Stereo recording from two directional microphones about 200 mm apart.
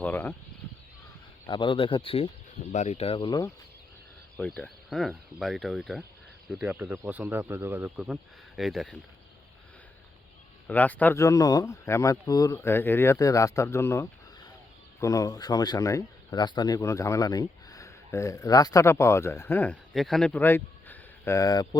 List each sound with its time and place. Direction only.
0.0 s speech: 10° left (ahead or behind)
1.5 s speech: 25° left (ahead or behind)
4.4 s speech: 5° left (ahead or behind)
10.7 s speech: 10° left (ahead or behind)